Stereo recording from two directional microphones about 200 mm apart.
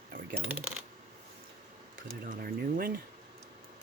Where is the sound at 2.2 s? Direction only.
45° right (ahead or behind).